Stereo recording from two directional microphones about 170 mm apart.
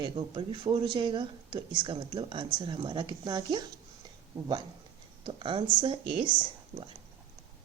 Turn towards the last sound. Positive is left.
turn(degrees=-30)  # may be behind; listen again after turning